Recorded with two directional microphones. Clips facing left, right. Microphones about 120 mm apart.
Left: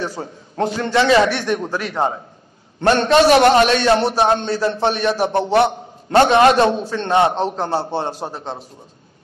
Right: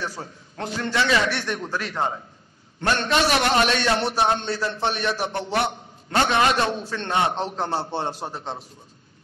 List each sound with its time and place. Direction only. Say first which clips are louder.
0.0 s a man's voice: left 6 dB; 30° left (ahead or behind)
2.8 s a man's voice: left 9 dB; 30° left (ahead or behind)